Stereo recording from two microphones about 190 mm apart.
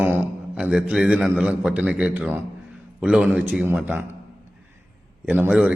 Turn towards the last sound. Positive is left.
turn(degrees=-5)  # may be behind; listen again after turning